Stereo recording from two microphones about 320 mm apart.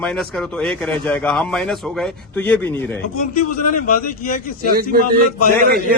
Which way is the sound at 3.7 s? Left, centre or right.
Left.